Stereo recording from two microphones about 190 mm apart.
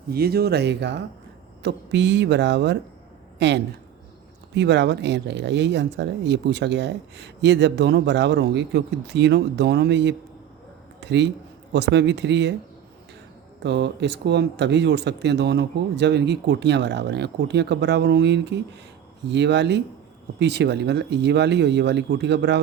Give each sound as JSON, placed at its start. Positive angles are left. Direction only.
{"t": 0.1, "sound": "a woman's voice", "side_deg": -55}
{"t": 13.6, "sound": "speech", "side_deg": -65}